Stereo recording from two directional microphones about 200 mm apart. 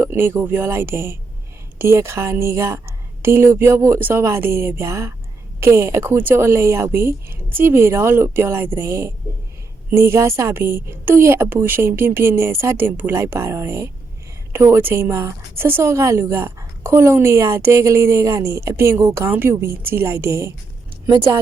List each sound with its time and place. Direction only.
0.0 s a woman's voice: 10° right (ahead or behind)
21.1 s speech: 25° right (ahead or behind)